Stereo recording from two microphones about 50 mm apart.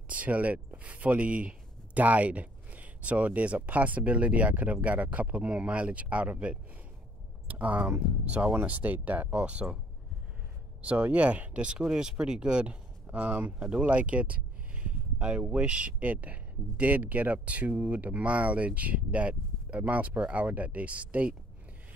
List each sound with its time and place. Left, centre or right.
0.1 s speech: right
10.8 s speech: right
11.8 s speech: centre; by 21.3 s right